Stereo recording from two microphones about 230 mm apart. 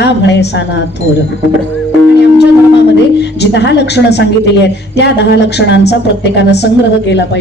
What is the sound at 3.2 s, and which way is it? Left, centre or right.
A woman's voice, left.